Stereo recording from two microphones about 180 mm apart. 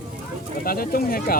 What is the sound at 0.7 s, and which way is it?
Speech, 55° left (ahead or behind).